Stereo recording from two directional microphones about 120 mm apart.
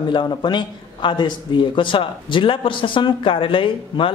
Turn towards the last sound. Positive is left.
turn(degrees=45)  # may be behind; listen again after turning